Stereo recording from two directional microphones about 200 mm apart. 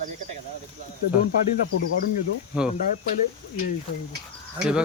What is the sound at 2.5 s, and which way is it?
Speech, 5° right (ahead or behind).